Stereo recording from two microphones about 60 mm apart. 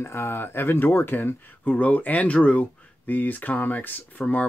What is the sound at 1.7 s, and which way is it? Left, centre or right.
Speech, left.